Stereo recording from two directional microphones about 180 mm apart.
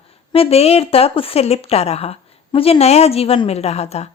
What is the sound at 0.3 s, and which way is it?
Speech, 35° left (ahead or behind).